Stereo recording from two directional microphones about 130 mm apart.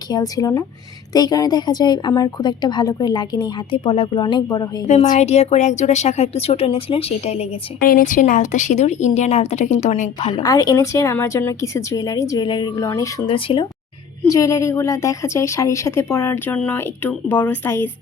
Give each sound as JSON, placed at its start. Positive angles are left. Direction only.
{"t": 0.1, "sound": "a woman's voice", "side_deg": 30}
{"t": 5.1, "sound": "speech", "side_deg": 55}
{"t": 7.8, "sound": "speech", "side_deg": 90}
{"t": 10.3, "sound": "a woman's voice", "side_deg": 30}
{"t": 13.2, "sound": "a woman's voice", "side_deg": 40}
{"t": 14.3, "sound": "a woman's voice", "side_deg": 25}